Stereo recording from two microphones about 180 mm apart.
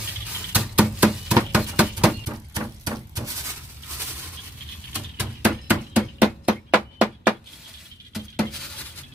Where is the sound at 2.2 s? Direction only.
20° right (ahead or behind).